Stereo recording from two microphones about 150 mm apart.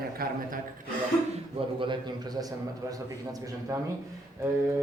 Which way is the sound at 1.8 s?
30° right (ahead or behind).